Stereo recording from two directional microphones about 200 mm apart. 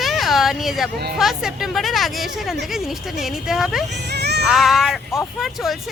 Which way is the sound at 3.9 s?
55° right (ahead or behind).